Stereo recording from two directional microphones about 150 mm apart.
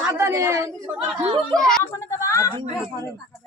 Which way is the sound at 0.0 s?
15° right (ahead or behind).